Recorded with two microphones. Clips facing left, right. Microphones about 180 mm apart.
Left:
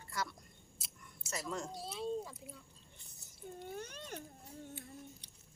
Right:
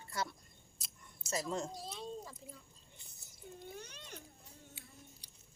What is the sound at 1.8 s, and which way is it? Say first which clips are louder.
Speech: left 5 dB; 5° left (ahead or behind).